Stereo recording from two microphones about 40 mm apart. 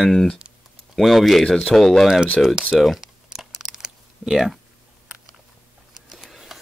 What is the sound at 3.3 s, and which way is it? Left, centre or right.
Crumpling, centre.